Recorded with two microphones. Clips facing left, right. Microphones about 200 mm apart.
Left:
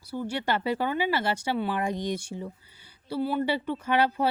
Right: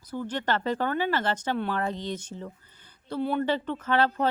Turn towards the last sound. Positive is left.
turn(degrees=10)  # may be behind; listen again after turning